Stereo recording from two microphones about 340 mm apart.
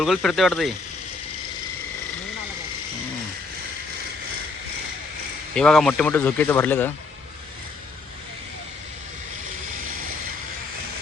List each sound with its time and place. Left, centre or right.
0.0 s speech: centre
5.5 s speech: centre